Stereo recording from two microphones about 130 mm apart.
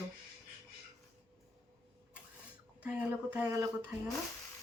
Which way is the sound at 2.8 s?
10° right (ahead or behind).